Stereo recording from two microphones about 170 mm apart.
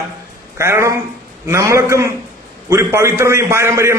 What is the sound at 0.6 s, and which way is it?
A man's voice, 15° right (ahead or behind).